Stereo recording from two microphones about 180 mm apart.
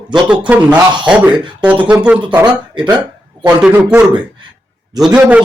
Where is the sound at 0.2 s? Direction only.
5° right (ahead or behind).